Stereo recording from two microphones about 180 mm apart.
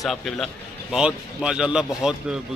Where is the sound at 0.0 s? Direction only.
Centre (ahead or behind).